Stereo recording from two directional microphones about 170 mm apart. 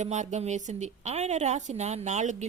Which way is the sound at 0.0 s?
45° right (ahead or behind).